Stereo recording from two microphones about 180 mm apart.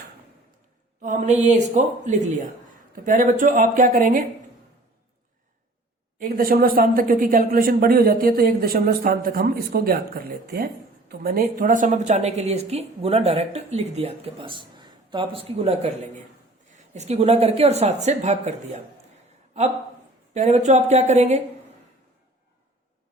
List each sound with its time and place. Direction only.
1.0 s a woman's voice: 40° right (ahead or behind)
6.1 s a woman's voice: 50° right (ahead or behind)
20.3 s a woman's voice: 40° right (ahead or behind)